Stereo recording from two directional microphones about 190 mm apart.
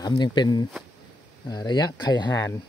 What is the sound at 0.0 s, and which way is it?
Speech, 25° left (ahead or behind).